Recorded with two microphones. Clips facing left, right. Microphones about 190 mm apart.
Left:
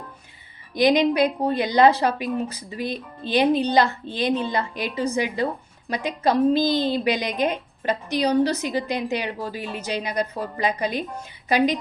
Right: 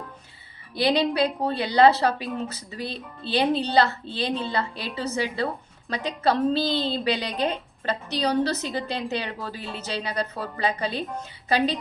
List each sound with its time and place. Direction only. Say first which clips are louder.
0.7 s a woman's voice: left 4 dB; 15° left (ahead or behind)